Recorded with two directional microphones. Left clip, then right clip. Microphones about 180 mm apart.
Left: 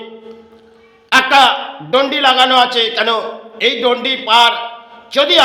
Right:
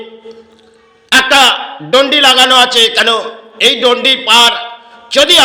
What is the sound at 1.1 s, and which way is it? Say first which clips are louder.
A man's voice: right 2 dB; 15° right (ahead or behind).